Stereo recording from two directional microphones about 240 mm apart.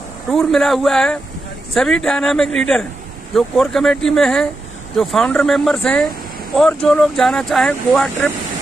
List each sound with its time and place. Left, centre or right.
0.3 s speech: centre